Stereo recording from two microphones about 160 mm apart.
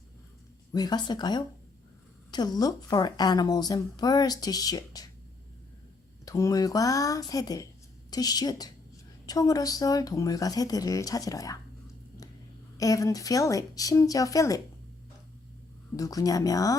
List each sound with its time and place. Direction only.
0.7 s a woman's voice: 25° left (ahead or behind)
6.2 s a woman's voice: 20° left (ahead or behind)
12.7 s a woman's voice: 20° left (ahead or behind)
16.0 s a woman's voice: 20° left (ahead or behind)